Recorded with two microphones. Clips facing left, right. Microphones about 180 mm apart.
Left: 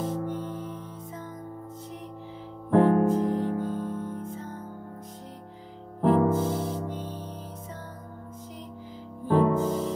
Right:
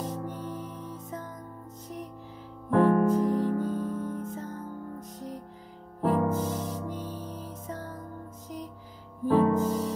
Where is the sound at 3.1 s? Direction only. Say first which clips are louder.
Even; 45° left (ahead or behind).